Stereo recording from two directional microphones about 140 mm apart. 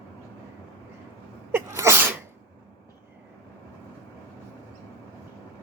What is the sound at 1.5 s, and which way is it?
Sneeze, 20° right (ahead or behind).